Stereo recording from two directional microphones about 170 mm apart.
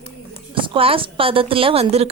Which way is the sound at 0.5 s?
30° right (ahead or behind).